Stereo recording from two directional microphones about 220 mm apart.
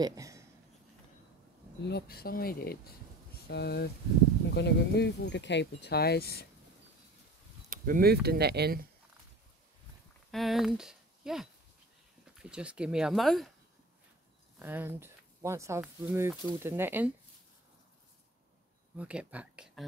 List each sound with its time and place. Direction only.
0.0 s speech: 15° right (ahead or behind)
1.9 s speech: 45° left (ahead or behind)
7.7 s speech: 40° right (ahead or behind)
10.3 s speech: centre (ahead or behind)
14.6 s speech: 10° right (ahead or behind)
18.9 s speech: 5° right (ahead or behind)